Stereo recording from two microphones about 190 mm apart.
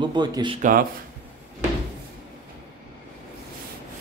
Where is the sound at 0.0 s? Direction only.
20° right (ahead or behind).